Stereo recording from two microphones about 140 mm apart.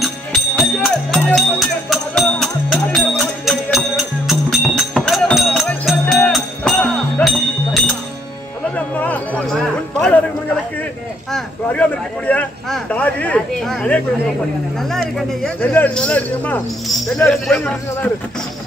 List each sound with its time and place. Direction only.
0.0 s music: centre (ahead or behind)
8.7 s a sound: 10° left (ahead or behind)
11.3 s speech: 10° left (ahead or behind)